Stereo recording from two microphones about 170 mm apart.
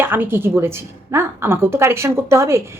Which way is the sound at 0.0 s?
10° right (ahead or behind).